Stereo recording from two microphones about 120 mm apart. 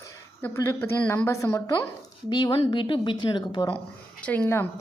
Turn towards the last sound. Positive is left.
turn(degrees=15)  # may be behind; listen again after turning